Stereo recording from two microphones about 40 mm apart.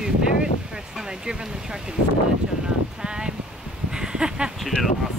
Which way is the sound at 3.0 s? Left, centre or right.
Centre.